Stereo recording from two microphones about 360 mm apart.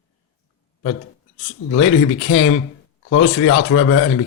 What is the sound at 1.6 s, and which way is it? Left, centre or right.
Speech, left.